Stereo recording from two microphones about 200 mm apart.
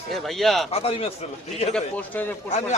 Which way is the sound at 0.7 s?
30° left (ahead or behind).